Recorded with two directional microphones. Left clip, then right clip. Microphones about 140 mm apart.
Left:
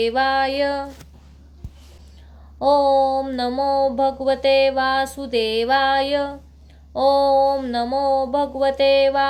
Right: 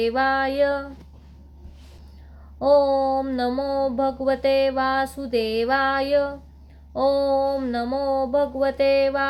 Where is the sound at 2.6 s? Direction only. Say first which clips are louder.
Left 2 dB; 20° left (ahead or behind).